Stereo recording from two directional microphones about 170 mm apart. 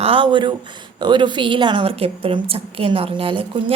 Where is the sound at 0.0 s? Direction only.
30° right (ahead or behind).